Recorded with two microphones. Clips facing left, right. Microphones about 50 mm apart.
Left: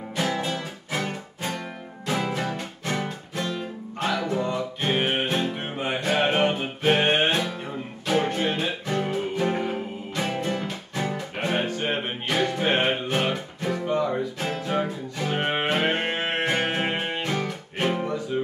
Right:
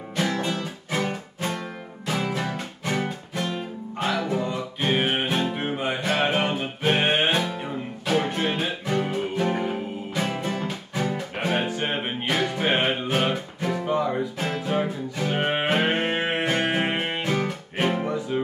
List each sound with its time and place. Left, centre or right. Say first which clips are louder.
0.1 s music: right 1 dB; centre
2.0 s music: even; centre
6.1 s music: left 3 dB; centre
7.0 s music: even; centre
16.4 s music: left 1 dB; centre
16.7 s music: right 2 dB; centre